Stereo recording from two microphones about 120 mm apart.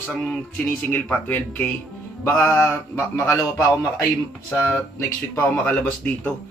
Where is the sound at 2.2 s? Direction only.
20° left (ahead or behind).